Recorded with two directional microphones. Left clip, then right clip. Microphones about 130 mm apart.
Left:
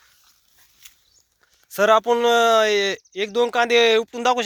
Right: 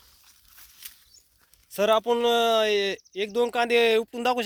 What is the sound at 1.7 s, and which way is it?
Speech, 10° right (ahead or behind).